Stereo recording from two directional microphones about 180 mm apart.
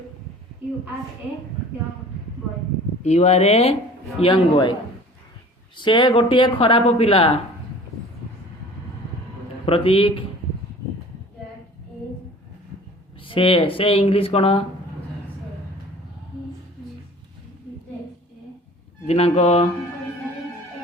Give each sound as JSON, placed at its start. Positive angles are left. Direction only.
{"t": 3.0, "sound": "speech", "side_deg": 40}
{"t": 5.7, "sound": "speech", "side_deg": 25}
{"t": 9.6, "sound": "speech", "side_deg": 30}
{"t": 13.2, "sound": "speech", "side_deg": 30}
{"t": 19.0, "sound": "speech", "side_deg": 35}